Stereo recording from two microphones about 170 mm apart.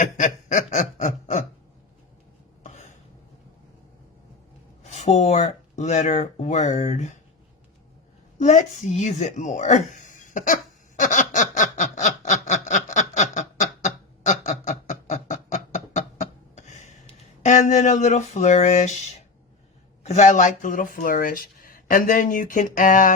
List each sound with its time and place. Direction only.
0.0 s snicker: 45° left (ahead or behind)
2.6 s cough: 45° left (ahead or behind)
4.8 s speech: 40° left (ahead or behind)
8.4 s a sound: 45° left (ahead or behind)
17.4 s speech: 45° left (ahead or behind)